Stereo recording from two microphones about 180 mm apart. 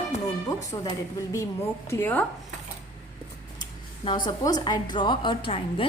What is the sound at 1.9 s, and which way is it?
Speech, 10° left (ahead or behind).